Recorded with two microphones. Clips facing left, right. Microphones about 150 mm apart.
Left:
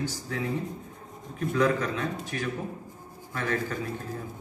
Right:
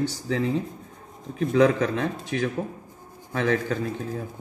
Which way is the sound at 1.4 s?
75° right (ahead or behind).